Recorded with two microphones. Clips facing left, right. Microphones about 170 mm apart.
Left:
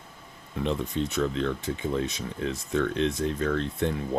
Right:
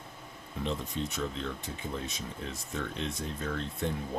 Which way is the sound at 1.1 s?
75° left (ahead or behind).